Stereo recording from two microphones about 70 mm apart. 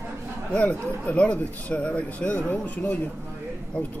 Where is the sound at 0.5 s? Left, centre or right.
Centre.